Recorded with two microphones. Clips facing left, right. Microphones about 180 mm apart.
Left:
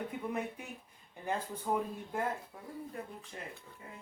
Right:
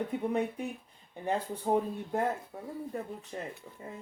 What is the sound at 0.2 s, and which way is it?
Speech, 35° right (ahead or behind).